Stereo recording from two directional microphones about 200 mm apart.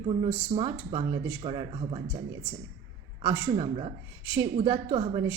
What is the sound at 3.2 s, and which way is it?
A woman's voice, 25° right (ahead or behind).